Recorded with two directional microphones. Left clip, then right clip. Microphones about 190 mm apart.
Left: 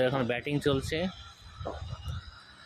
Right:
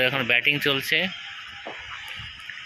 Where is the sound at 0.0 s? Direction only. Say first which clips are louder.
Right 8 dB; 10° left (ahead or behind).